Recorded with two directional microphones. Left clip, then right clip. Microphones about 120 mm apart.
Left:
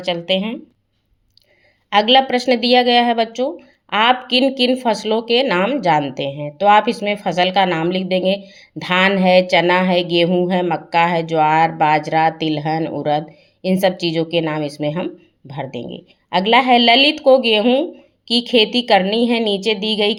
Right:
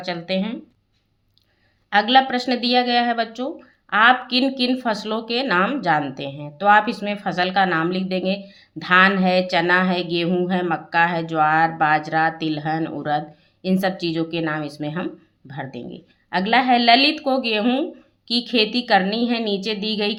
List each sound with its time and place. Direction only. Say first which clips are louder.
0.0 s speech: left 6 dB; 50° left (ahead or behind)
1.9 s speech: left 3 dB; 55° left (ahead or behind)